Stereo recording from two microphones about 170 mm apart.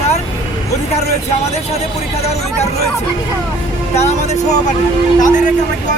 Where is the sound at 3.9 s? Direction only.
40° left (ahead or behind).